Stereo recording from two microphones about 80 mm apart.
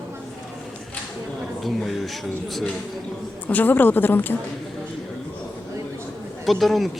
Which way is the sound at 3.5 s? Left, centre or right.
Left.